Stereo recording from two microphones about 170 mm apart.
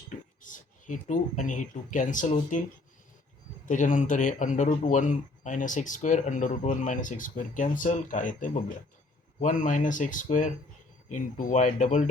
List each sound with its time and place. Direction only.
0.4 s speech: 50° left (ahead or behind)
3.7 s speech: 50° left (ahead or behind)